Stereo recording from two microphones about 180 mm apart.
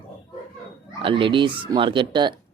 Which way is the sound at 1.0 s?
30° right (ahead or behind).